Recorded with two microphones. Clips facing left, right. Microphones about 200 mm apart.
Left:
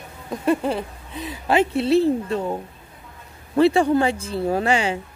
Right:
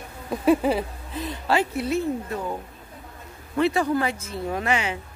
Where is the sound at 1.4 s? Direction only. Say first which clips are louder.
Left 6 dB; 25° left (ahead or behind).